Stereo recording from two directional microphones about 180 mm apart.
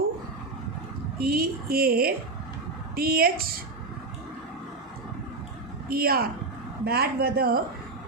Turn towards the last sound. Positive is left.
turn(degrees=-55)  # may be behind; listen again after turning